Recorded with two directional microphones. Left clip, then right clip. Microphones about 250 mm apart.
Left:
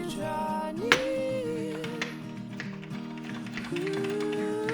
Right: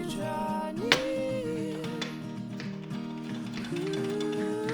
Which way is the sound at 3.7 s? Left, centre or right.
Centre.